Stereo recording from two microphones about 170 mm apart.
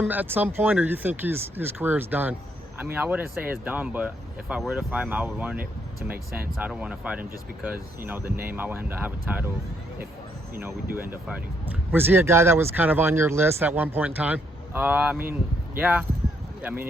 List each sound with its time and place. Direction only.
0.0 s speech: 10° right (ahead or behind)
6.1 s speech: 60° right (ahead or behind)
6.6 s speech: 5° right (ahead or behind)
10.9 s speech: 15° right (ahead or behind)